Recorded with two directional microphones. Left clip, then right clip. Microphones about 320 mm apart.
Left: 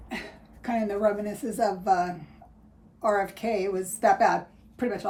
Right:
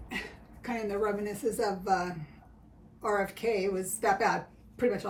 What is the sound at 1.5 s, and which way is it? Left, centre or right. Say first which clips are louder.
A woman's voice: left 7 dB; centre.